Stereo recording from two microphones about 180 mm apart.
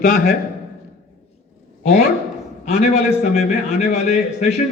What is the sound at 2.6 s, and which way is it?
A man's voice, 35° left (ahead or behind).